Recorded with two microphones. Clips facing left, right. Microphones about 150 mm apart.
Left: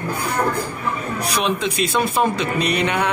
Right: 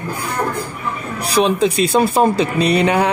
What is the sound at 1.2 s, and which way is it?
Speech, 35° right (ahead or behind).